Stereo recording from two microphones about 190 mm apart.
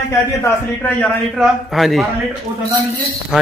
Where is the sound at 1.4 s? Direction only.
Centre (ahead or behind).